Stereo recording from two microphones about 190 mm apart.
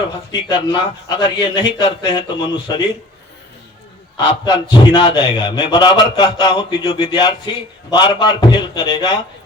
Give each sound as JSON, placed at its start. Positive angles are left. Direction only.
{"t": 0.3, "sound": "a man's voice", "side_deg": 25}
{"t": 4.4, "sound": "a man's voice", "side_deg": 25}